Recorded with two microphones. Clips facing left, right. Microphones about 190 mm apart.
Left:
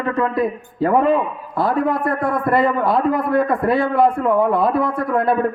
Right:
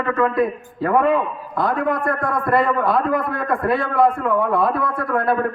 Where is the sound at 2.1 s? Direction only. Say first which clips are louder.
Left 2 dB; centre (ahead or behind).